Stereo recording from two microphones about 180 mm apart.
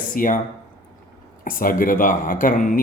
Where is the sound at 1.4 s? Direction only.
50° left (ahead or behind).